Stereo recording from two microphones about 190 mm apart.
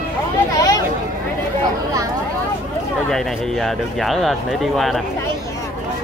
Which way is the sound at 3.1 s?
Centre (ahead or behind).